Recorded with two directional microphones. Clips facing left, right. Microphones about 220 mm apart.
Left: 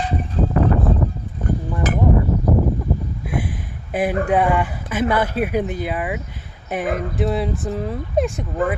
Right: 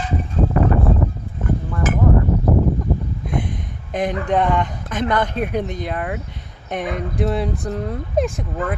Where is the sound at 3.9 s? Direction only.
5° left (ahead or behind).